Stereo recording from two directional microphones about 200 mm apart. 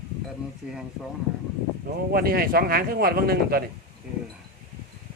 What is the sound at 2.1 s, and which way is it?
A man's voice, 45° right (ahead or behind).